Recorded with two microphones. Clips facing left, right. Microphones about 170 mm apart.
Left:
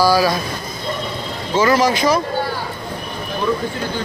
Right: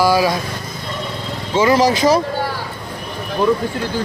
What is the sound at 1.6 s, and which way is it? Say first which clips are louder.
Speech: right 1 dB; 25° right (ahead or behind).